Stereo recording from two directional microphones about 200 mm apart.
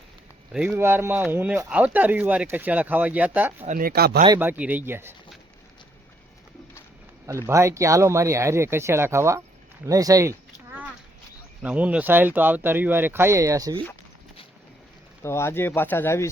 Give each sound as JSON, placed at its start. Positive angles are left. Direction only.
{"t": 0.5, "sound": "speech", "side_deg": -5}
{"t": 3.6, "sound": "speech", "side_deg": -40}
{"t": 4.4, "sound": "speech", "side_deg": -10}
{"t": 7.3, "sound": "speech", "side_deg": -15}
{"t": 11.6, "sound": "speech", "side_deg": -5}
{"t": 15.2, "sound": "speech", "side_deg": 15}